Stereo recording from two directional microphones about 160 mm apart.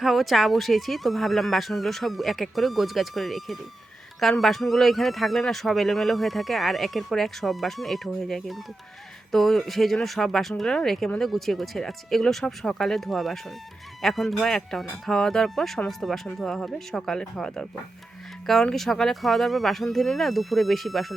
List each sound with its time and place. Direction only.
0.0 s speech: centre (ahead or behind)